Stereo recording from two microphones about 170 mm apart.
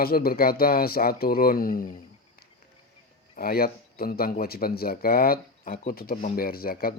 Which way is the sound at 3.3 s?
60° left (ahead or behind).